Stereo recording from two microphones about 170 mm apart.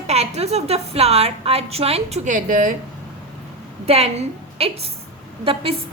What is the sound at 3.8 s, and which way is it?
A woman's voice, 35° right (ahead or behind).